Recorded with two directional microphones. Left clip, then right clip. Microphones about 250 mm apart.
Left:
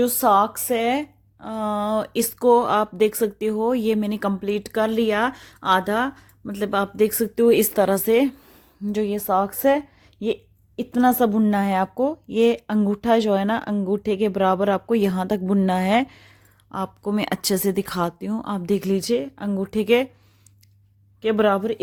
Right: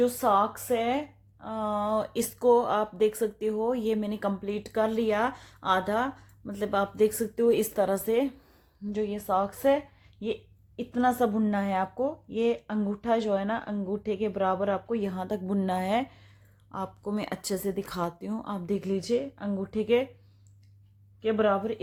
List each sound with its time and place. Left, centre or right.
0.0 s speech: left
21.2 s speech: left